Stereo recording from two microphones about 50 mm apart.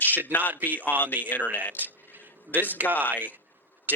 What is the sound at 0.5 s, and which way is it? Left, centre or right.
Speech, right.